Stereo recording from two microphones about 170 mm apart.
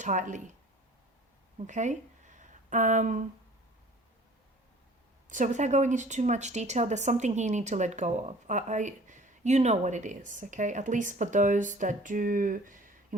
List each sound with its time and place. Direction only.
0.0 s speech: 45° right (ahead or behind)
1.5 s speech: 45° right (ahead or behind)
5.3 s speech: 45° right (ahead or behind)